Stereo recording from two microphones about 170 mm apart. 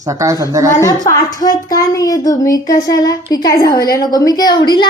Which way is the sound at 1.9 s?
20° left (ahead or behind).